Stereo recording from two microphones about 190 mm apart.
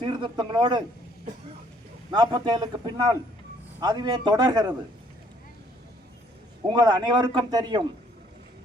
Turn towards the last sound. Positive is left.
turn(degrees=-25)  # may be behind; listen again after turning